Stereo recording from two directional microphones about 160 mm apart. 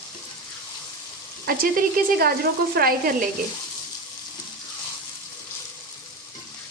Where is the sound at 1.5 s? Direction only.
65° right (ahead or behind).